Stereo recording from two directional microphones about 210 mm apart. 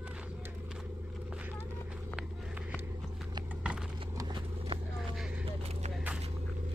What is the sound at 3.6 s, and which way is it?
Computer keyboard, 5° right (ahead or behind).